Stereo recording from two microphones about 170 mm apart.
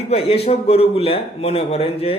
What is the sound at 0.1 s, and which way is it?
A man's voice, 35° left (ahead or behind).